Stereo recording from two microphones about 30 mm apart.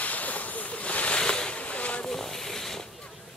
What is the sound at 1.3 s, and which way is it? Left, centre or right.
Boat, left.